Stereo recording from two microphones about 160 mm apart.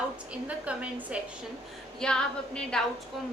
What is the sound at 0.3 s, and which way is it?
Speech, 10° right (ahead or behind).